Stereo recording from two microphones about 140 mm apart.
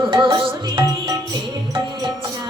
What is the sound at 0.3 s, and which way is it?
Music, 35° right (ahead or behind).